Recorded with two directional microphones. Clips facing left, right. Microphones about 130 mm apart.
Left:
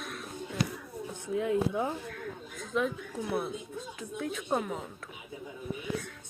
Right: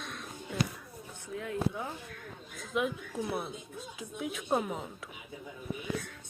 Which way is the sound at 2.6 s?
5° right (ahead or behind).